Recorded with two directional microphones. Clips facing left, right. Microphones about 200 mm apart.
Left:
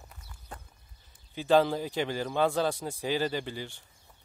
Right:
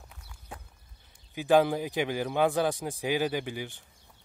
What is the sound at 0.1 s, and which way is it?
Walk, 5° right (ahead or behind).